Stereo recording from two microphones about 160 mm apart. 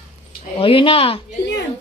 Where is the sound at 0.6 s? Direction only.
35° left (ahead or behind).